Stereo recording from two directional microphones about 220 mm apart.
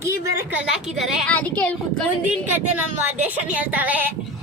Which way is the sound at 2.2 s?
5° right (ahead or behind).